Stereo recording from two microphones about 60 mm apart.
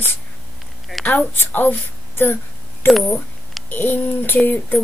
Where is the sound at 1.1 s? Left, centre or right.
Left.